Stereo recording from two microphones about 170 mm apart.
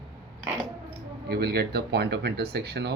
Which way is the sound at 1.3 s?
70° right (ahead or behind).